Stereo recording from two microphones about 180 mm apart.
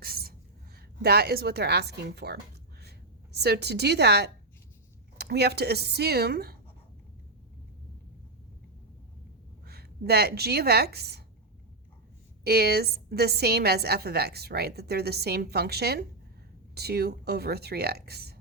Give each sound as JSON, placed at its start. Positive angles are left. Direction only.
{"t": 0.0, "sound": "a sound", "side_deg": -55}
{"t": 0.8, "sound": "a woman's voice", "side_deg": -60}
{"t": 9.6, "sound": "a woman's voice", "side_deg": -60}
{"t": 12.5, "sound": "a woman's voice", "side_deg": -60}